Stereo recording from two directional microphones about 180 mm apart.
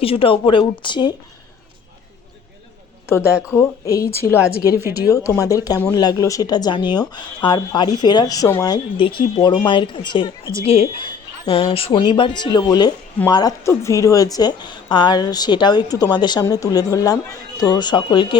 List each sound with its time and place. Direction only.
0.0 s speech: 30° left (ahead or behind)
3.5 s a woman's voice: 15° left (ahead or behind)
4.8 s speech: 15° right (ahead or behind)
5.1 s a woman's voice: 15° left (ahead or behind)